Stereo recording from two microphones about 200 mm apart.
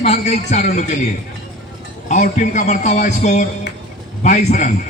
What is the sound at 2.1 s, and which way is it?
A man's voice, 40° left (ahead or behind).